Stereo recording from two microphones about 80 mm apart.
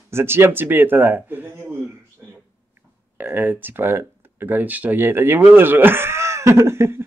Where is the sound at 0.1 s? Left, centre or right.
Right.